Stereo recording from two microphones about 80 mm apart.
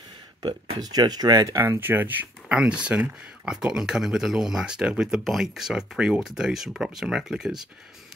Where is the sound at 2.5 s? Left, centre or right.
Centre.